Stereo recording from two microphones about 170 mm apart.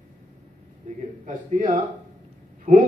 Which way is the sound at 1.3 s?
50° right (ahead or behind).